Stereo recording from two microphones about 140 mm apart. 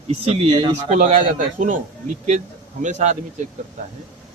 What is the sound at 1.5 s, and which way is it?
Speech, 70° right (ahead or behind).